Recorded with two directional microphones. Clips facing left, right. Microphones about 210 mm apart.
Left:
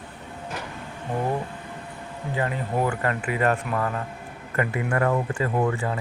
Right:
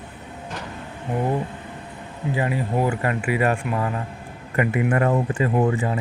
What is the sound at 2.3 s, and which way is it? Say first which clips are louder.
Speech: right 3 dB; 15° right (ahead or behind).